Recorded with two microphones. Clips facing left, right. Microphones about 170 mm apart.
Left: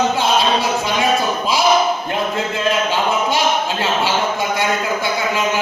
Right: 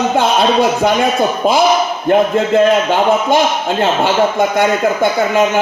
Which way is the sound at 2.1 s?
50° right (ahead or behind).